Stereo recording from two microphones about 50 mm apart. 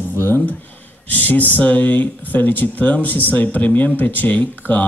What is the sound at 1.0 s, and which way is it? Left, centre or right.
Speech, left.